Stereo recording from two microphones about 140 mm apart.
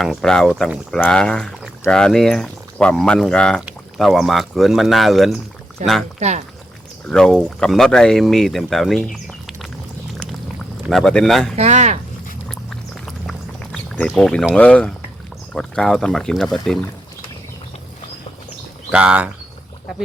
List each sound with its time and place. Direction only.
0.0 s speech: centre (ahead or behind)
6.1 s speech: 55° right (ahead or behind)
7.1 s speech: 5° left (ahead or behind)
10.8 s speech: centre (ahead or behind)
11.5 s speech: 55° right (ahead or behind)
12.5 s pour: centre (ahead or behind)
14.1 s speech: 5° left (ahead or behind)
18.9 s speech: 10° right (ahead or behind)